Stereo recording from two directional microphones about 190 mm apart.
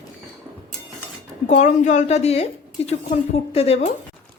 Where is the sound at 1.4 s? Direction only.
40° left (ahead or behind).